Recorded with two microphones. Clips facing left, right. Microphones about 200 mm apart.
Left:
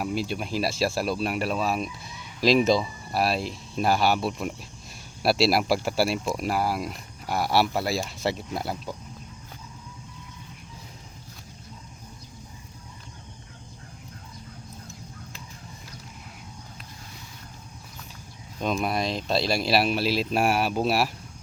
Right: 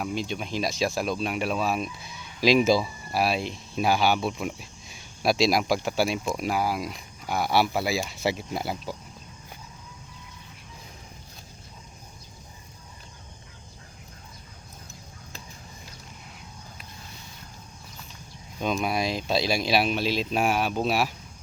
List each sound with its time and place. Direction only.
0.0 s speech: 5° left (ahead or behind)
18.6 s speech: centre (ahead or behind)